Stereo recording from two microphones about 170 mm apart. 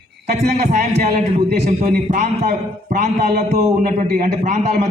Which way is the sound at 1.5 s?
45° right (ahead or behind).